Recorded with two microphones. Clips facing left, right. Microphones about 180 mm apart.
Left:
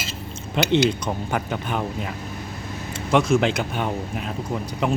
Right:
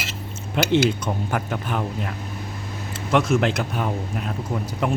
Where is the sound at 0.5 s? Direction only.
5° right (ahead or behind).